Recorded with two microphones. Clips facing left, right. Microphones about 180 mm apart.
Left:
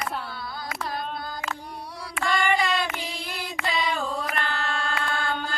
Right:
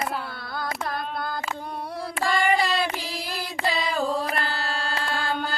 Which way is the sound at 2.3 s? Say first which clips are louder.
Right 2 dB; 35° right (ahead or behind).